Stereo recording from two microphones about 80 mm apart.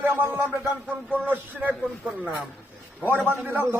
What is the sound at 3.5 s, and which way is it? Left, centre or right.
Speech, right.